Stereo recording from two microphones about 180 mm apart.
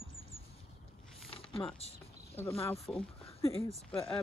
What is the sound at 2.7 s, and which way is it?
Speech, centre (ahead or behind).